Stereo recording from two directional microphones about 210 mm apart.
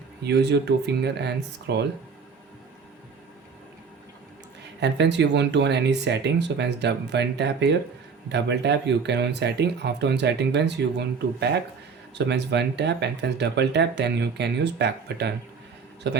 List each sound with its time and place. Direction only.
0.2 s speech: 55° right (ahead or behind)
4.8 s speech: 55° right (ahead or behind)